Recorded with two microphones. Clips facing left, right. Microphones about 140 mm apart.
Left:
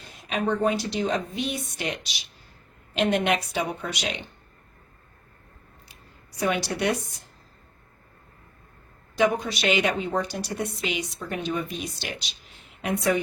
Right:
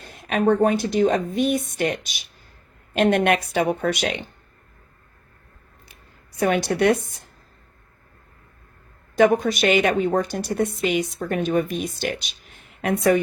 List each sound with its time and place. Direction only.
0.0 s a woman's voice: 55° right (ahead or behind)
5.9 s a sound: 55° right (ahead or behind)
9.1 s a woman's voice: 50° right (ahead or behind)